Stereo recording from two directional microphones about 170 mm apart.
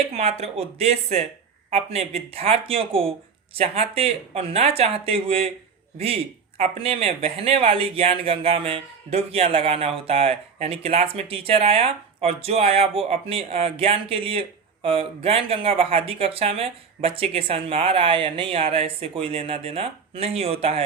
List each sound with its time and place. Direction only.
0.1 s speech: 40° right (ahead or behind)
6.6 s speech: 35° right (ahead or behind)